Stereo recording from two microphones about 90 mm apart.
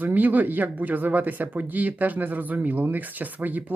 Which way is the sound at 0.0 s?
20° right (ahead or behind).